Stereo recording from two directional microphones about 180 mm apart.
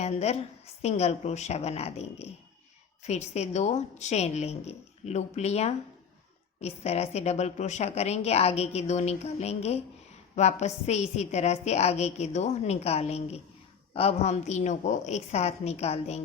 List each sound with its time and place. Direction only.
0.0 s a woman's voice: 35° left (ahead or behind)